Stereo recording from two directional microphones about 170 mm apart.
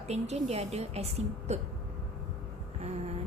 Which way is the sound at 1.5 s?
40° right (ahead or behind).